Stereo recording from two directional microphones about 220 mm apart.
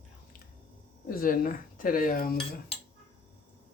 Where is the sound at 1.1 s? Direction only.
40° left (ahead or behind).